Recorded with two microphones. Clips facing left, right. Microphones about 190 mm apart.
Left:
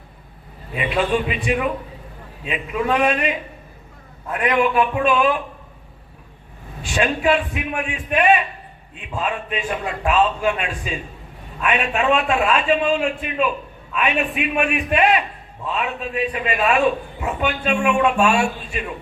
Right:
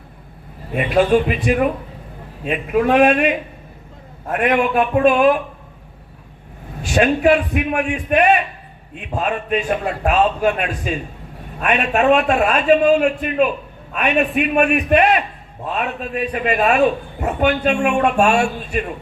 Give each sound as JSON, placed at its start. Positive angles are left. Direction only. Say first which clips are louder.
{"t": 0.7, "sound": "a man's voice", "louder": "right 6 dB", "side_deg": -45}
{"t": 6.8, "sound": "a woman's voice", "louder": "right 5 dB", "side_deg": -45}
{"t": 10.4, "sound": "a man's voice", "louder": "right 4 dB", "side_deg": -45}